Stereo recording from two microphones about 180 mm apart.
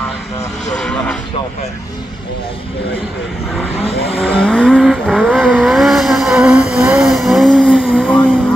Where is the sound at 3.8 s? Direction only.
35° left (ahead or behind).